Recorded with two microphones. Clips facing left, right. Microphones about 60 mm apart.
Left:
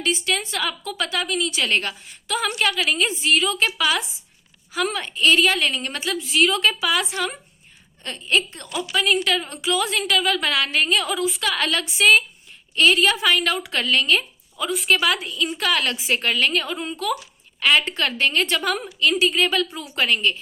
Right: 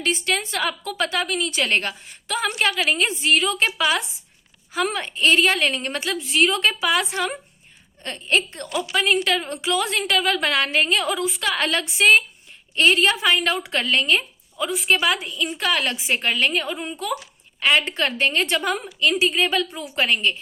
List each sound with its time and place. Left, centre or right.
0.0 s a woman's voice: right